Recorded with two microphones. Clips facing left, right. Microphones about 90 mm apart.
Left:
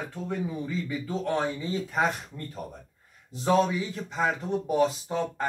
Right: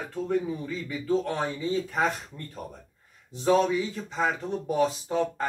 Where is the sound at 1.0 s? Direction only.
20° left (ahead or behind).